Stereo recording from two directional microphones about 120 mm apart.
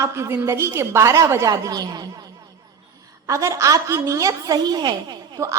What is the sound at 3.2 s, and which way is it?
A woman's voice, 25° right (ahead or behind).